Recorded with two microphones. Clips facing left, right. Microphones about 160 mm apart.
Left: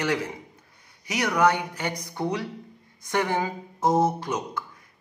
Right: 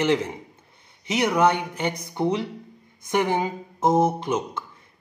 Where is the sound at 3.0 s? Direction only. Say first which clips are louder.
Right 3 dB; 20° right (ahead or behind).